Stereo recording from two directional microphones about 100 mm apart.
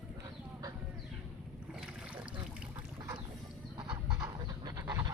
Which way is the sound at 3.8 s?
40° right (ahead or behind).